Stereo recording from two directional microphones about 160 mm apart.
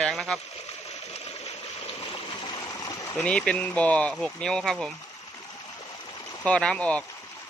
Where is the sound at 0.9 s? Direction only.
40° left (ahead or behind); by 3.1 s 20° left (ahead or behind).